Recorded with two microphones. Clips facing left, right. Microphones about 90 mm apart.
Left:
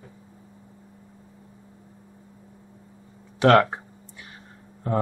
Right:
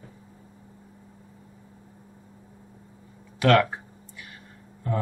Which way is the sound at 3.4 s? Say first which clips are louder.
Left 3 dB; 40° left (ahead or behind).